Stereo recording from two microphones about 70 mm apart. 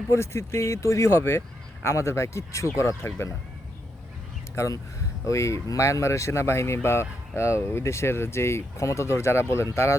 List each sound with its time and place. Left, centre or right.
0.1 s speech: left
4.5 s speech: left